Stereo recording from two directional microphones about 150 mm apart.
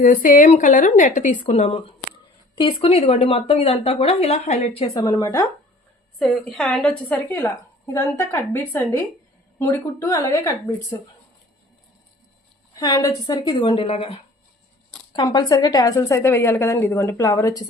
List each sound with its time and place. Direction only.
0.0 s speech: 65° left (ahead or behind); by 2.0 s 45° left (ahead or behind)
2.6 s speech: 35° left (ahead or behind)
4.9 s a woman's voice: 25° left (ahead or behind)
6.1 s a woman's voice: centre (ahead or behind); by 10.8 s 20° left (ahead or behind)
12.7 s a woman's voice: 25° left (ahead or behind)
13.7 s speech: 40° left (ahead or behind)
15.1 s a woman's voice: 25° left (ahead or behind)